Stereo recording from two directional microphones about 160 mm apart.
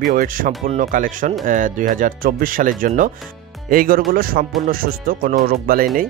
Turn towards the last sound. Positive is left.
turn(degrees=-65)  # may be behind; listen again after turning